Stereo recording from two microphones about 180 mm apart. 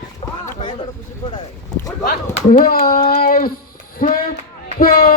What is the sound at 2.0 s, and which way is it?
Speech, 60° left (ahead or behind).